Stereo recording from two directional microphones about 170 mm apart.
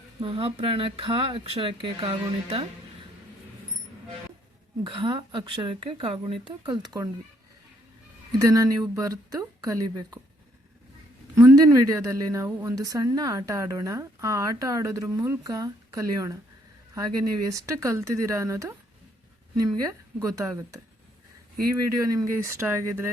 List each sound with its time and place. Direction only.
0.2 s speech: 30° right (ahead or behind)
4.8 s a woman's voice: 30° right (ahead or behind)
8.4 s a woman's voice: 20° right (ahead or behind)
11.3 s a woman's voice: 20° right (ahead or behind)